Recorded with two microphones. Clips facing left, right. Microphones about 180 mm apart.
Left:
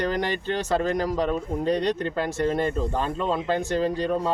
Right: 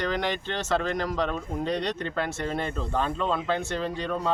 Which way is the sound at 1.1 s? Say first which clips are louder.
Left 4 dB; 10° left (ahead or behind).